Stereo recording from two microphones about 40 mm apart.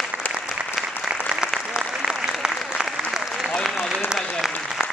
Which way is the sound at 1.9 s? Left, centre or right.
Centre.